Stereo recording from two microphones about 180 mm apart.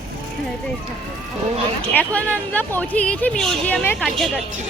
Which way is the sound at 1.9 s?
10° left (ahead or behind).